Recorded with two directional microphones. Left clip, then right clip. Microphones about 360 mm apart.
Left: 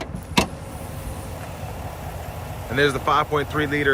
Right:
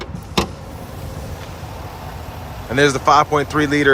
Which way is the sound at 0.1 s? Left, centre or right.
Centre.